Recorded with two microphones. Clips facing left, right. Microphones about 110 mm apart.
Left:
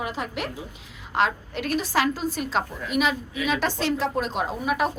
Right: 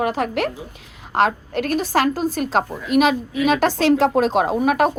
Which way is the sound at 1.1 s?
50° right (ahead or behind).